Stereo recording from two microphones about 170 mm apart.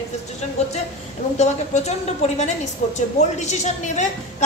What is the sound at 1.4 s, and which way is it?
A woman's voice, 40° left (ahead or behind).